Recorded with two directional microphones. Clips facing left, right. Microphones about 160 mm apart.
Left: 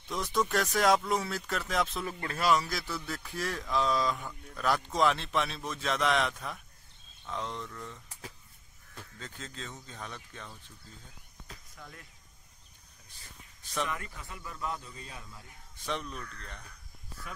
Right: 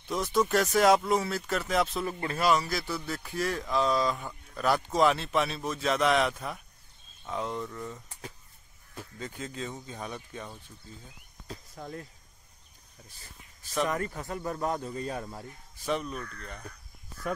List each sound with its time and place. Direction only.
0.1 s speech: 5° right (ahead or behind)
11.4 s speech: 35° right (ahead or behind)
13.8 s a man's voice: 45° right (ahead or behind)
15.8 s speech: 5° right (ahead or behind)